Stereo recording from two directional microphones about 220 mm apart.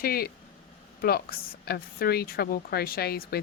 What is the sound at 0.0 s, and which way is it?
A woman's voice, 40° left (ahead or behind).